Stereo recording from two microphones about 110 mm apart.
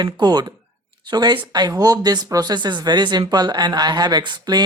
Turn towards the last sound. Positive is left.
turn(degrees=-40)  # may be behind; listen again after turning